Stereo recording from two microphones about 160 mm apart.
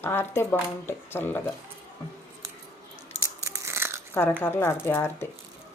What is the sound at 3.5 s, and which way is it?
Biting, 15° right (ahead or behind).